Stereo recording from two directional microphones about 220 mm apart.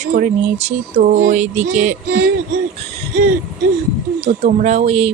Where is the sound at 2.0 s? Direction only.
50° right (ahead or behind).